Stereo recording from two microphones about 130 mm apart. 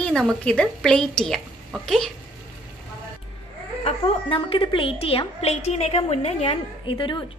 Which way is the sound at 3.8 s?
45° left (ahead or behind).